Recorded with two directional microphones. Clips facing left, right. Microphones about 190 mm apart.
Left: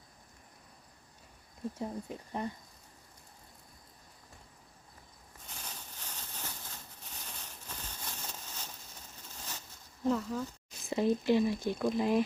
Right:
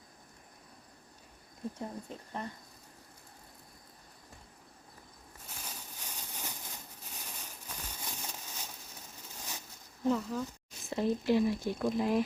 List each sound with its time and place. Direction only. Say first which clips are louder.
1.8 s speech: left 3 dB; 15° left (ahead or behind)
5.5 s a sound: even; 10° right (ahead or behind)
10.0 s speech: even; centre (ahead or behind)